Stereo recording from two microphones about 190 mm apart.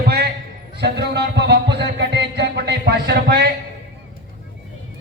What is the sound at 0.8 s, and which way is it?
Music, 60° right (ahead or behind).